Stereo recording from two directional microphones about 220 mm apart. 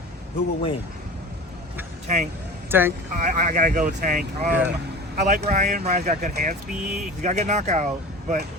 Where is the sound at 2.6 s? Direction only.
10° right (ahead or behind).